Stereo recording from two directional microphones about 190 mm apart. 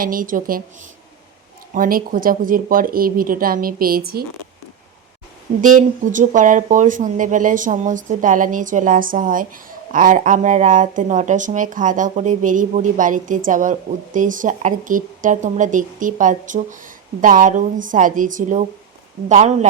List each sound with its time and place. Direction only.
0.0 s speech: 45° right (ahead or behind)
1.7 s speech: 45° right (ahead or behind)
5.6 s speech: 45° right (ahead or behind)